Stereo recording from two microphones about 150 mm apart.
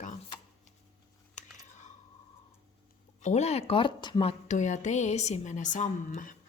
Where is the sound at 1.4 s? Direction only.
55° left (ahead or behind).